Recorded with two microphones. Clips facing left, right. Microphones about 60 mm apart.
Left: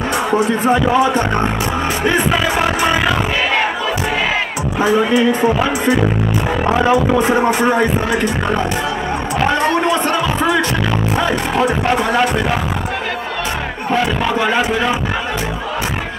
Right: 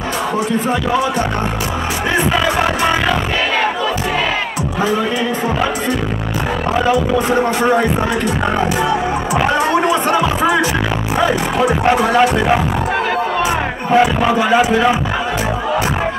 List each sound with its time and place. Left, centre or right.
10.1 s music: centre
13.9 s music: centre